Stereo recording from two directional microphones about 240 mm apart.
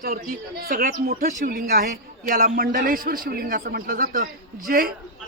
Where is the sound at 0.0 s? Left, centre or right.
Right.